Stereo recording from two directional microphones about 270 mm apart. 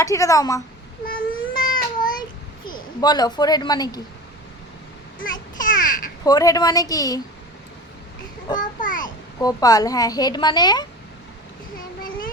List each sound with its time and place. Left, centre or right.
0.0 s a woman's voice: centre
1.0 s a sound: left
2.6 s a woman's voice: centre
5.2 s babbling: left
6.2 s a woman's voice: centre
8.5 s a sound: left
9.4 s a woman's voice: centre